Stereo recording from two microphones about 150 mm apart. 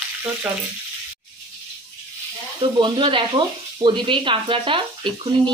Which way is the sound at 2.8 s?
35° right (ahead or behind).